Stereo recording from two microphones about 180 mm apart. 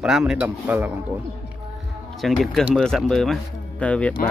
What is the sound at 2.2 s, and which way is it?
A man's voice, centre (ahead or behind).